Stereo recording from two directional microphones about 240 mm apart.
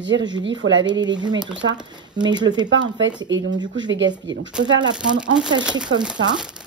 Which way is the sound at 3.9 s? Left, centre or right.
Right.